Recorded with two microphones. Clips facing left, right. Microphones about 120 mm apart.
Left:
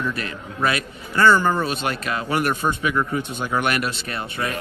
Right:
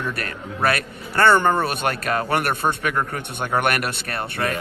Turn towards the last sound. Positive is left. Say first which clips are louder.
# right 1 dB
turn(degrees=-60)  # may be behind; listen again after turning